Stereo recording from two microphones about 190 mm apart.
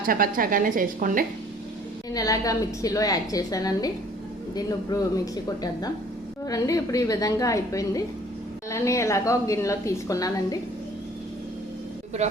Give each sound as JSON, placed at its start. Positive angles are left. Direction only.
{"t": 0.0, "sound": "a woman's voice", "side_deg": -50}
{"t": 2.1, "sound": "a woman's voice", "side_deg": 20}
{"t": 6.5, "sound": "a woman's voice", "side_deg": 20}
{"t": 12.2, "sound": "speech", "side_deg": -35}